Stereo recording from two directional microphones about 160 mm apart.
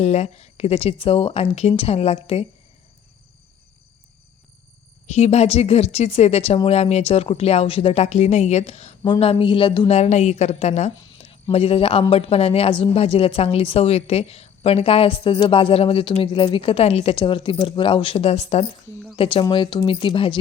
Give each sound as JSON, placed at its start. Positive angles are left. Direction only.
{"t": 0.0, "sound": "speech", "side_deg": 45}
{"t": 5.0, "sound": "speech", "side_deg": 45}